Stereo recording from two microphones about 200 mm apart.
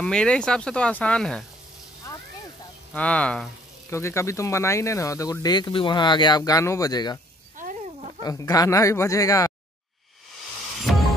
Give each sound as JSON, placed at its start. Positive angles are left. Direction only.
{"t": 0.0, "sound": "speech", "side_deg": 5}
{"t": 2.9, "sound": "speech", "side_deg": 5}
{"t": 7.5, "sound": "a sound", "side_deg": -40}
{"t": 8.2, "sound": "speech", "side_deg": 15}
{"t": 10.8, "sound": "music", "side_deg": 0}